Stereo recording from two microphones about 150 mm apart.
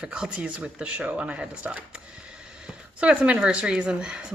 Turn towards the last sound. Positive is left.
turn(degrees=-5)  # may be behind; listen again after turning